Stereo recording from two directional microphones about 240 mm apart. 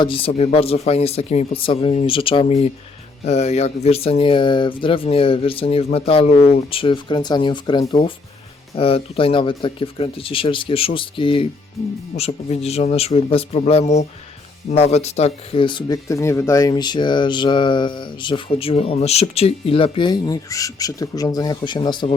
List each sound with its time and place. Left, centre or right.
0.0 s speech: left